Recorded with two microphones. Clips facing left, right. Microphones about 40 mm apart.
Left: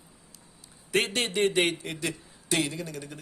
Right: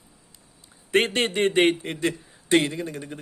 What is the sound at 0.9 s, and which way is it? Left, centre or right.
Speech, right.